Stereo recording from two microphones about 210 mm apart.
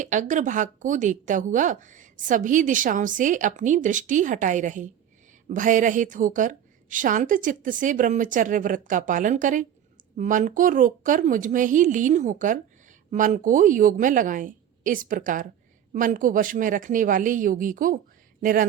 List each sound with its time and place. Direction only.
0.0 s speech: 35° right (ahead or behind)